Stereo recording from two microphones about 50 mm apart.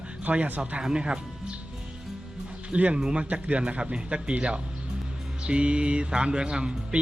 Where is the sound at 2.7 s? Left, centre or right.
Right.